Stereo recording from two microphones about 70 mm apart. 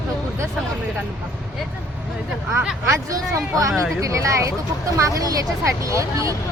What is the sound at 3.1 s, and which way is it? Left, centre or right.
A woman's voice, right.